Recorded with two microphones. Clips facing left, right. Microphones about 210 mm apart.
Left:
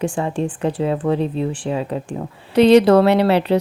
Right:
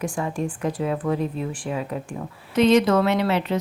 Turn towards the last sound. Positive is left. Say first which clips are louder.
# left 7 dB
turn(degrees=35)  # may be behind; listen again after turning